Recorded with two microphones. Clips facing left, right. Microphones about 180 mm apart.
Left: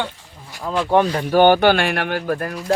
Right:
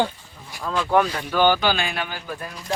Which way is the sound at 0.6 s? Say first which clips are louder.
Left 3 dB; 25° left (ahead or behind).